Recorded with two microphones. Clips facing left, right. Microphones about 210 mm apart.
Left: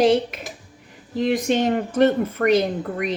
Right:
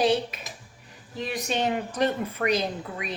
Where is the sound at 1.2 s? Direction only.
55° left (ahead or behind).